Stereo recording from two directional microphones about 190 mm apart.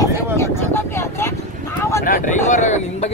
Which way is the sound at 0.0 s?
15° left (ahead or behind).